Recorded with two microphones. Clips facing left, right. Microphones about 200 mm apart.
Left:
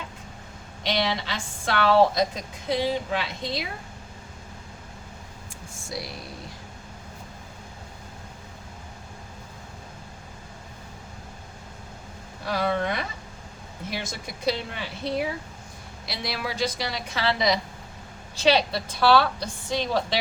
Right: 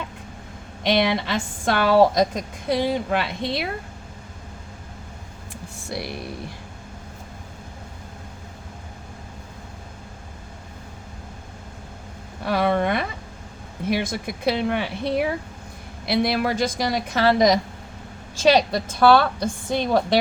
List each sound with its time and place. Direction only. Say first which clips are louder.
0.9 s a woman's voice: right 6 dB; 55° right (ahead or behind)
5.9 s speech: right 5 dB; 60° right (ahead or behind)
12.5 s a woman's voice: right 5 dB; 55° right (ahead or behind)